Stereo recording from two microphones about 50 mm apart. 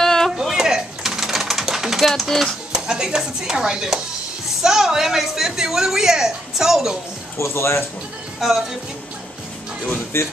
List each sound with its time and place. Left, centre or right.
0.0 s a sound: centre
0.4 s typing: centre
2.7 s speech: centre
7.3 s speech: left
8.4 s speech: centre
10.1 s speech: left